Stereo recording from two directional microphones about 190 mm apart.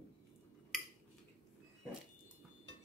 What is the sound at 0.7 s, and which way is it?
Cutlery, centre (ahead or behind).